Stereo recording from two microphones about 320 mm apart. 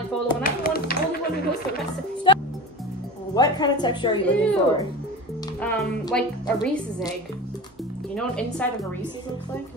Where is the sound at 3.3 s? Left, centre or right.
Centre.